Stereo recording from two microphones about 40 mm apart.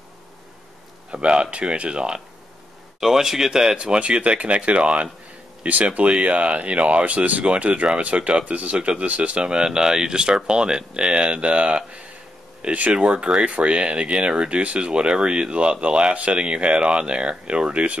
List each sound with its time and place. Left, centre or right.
1.1 s speech: right
3.0 s speech: centre
3.7 s speech: right
9.4 s speech: right
12.9 s speech: right